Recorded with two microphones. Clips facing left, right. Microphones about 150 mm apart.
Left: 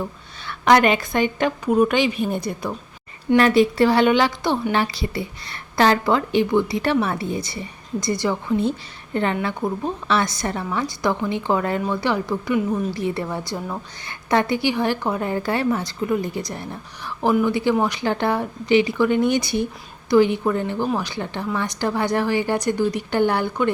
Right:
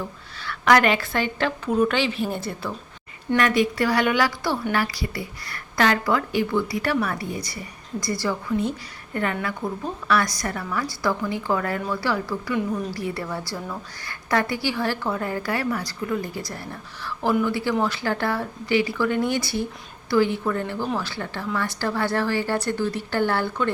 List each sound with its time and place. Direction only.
0.4 s a woman's voice: 20° left (ahead or behind)
3.3 s a woman's voice: 30° left (ahead or behind)